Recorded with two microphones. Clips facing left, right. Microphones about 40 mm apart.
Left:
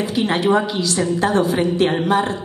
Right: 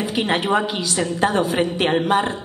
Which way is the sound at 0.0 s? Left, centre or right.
Right.